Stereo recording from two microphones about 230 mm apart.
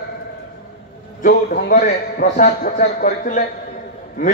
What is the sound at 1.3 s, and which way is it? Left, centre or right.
A man's voice, left.